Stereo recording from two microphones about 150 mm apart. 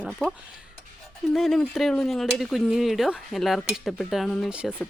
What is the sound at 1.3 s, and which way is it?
Speech, centre (ahead or behind).